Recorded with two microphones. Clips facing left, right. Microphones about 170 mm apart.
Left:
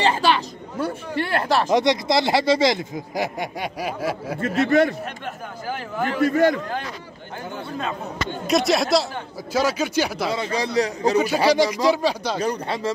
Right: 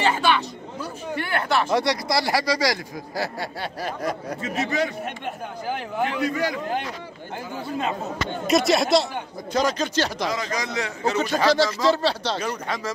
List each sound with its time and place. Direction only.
0.0 s speech: 35° left (ahead or behind)
1.7 s speech: 20° left (ahead or behind)
4.4 s a man's voice: 55° left (ahead or behind)
6.0 s a man's voice: 50° left (ahead or behind)
8.5 s speech: centre (ahead or behind)
10.3 s a man's voice: 30° left (ahead or behind)
11.1 s speech: 10° left (ahead or behind)
12.4 s a man's voice: 35° left (ahead or behind)